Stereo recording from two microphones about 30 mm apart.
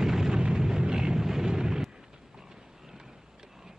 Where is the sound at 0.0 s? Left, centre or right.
Centre.